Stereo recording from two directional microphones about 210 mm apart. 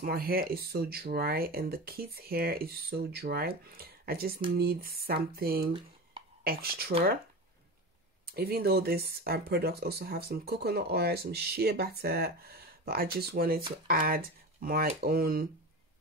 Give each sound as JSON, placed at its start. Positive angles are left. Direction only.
{"t": 0.0, "sound": "speech", "side_deg": -45}
{"t": 8.4, "sound": "speech", "side_deg": -50}